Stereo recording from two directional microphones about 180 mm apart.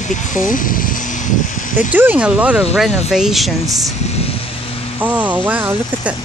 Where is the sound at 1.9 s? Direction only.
10° right (ahead or behind).